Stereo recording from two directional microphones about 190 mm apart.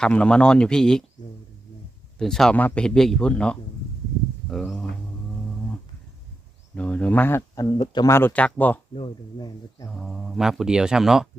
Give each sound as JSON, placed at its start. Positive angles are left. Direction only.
{"t": 0.0, "sound": "a man's voice", "side_deg": 5}
{"t": 2.1, "sound": "a man's voice", "side_deg": 0}
{"t": 6.7, "sound": "speech", "side_deg": 5}
{"t": 9.0, "sound": "speech", "side_deg": 20}
{"t": 9.9, "sound": "a man's voice", "side_deg": 0}